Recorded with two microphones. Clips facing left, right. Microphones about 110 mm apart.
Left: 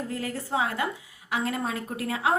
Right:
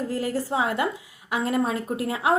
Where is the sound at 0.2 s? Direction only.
30° right (ahead or behind).